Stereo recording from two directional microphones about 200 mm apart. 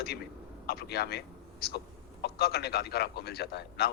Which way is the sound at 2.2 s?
55° left (ahead or behind).